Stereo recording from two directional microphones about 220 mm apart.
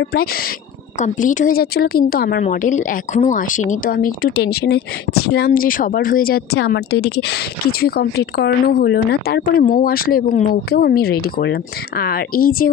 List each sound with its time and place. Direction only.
0.0 s speech: 45° left (ahead or behind)
0.9 s speech: 35° left (ahead or behind)